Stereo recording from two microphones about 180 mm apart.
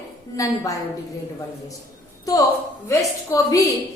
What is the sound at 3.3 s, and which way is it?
Speech, 20° left (ahead or behind).